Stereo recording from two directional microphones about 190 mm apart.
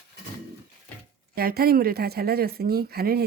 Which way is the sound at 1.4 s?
50° right (ahead or behind).